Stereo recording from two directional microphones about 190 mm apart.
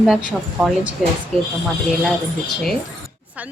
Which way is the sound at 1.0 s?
Centre (ahead or behind).